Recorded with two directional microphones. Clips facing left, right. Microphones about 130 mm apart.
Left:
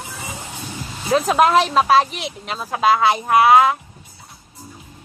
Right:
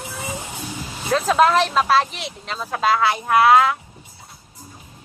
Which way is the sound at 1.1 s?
15° left (ahead or behind).